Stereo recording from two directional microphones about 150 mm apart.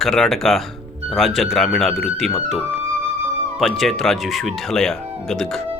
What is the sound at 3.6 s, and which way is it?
Speech, centre (ahead or behind).